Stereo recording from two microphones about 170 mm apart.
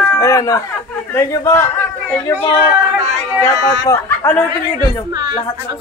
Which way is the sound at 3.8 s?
15° left (ahead or behind).